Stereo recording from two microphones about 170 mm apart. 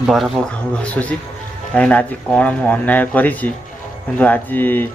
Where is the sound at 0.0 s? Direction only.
Centre (ahead or behind).